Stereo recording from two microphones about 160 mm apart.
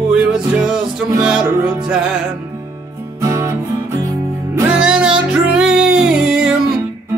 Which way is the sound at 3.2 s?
15° right (ahead or behind).